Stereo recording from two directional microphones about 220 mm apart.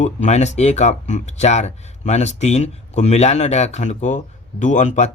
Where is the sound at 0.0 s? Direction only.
30° left (ahead or behind).